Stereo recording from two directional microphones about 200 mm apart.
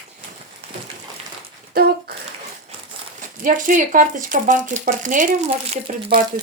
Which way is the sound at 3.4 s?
45° right (ahead or behind).